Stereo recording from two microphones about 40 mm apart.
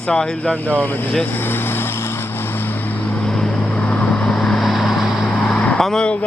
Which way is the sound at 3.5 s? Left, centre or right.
Left.